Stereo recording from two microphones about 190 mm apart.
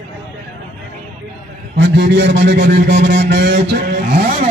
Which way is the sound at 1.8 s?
65° right (ahead or behind).